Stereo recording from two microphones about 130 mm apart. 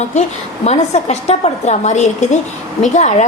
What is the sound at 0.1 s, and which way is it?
A woman's voice, 60° left (ahead or behind).